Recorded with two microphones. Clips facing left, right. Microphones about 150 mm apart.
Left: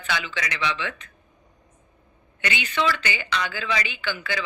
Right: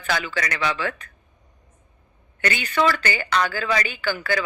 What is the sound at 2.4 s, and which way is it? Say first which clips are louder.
A woman's voice: right 4 dB; 45° right (ahead or behind).